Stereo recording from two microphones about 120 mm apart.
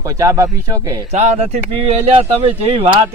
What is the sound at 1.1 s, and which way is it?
Speech, 70° right (ahead or behind).